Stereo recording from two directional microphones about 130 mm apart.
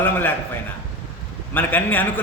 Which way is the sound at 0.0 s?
15° left (ahead or behind).